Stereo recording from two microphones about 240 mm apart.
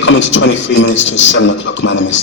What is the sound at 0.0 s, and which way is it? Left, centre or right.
A man's voice, left.